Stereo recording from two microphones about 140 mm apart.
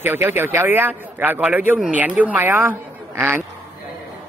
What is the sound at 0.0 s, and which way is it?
Speech, 15° right (ahead or behind).